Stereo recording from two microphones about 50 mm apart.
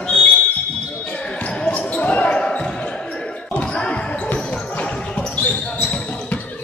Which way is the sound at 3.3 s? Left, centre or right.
Left.